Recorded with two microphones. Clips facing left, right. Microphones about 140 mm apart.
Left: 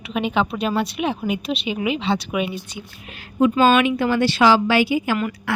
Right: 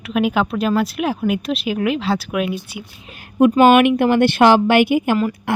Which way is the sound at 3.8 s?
55° right (ahead or behind).